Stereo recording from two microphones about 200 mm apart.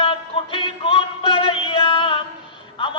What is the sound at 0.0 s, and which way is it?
Music, 25° left (ahead or behind).